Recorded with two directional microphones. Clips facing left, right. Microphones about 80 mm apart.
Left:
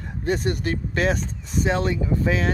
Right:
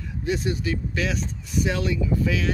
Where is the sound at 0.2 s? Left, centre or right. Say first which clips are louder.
Left 2 dB; left.